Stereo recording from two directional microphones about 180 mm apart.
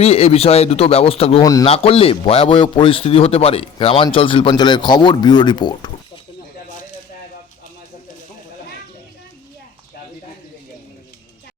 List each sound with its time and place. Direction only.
0.0 s a man's voice: 35° left (ahead or behind)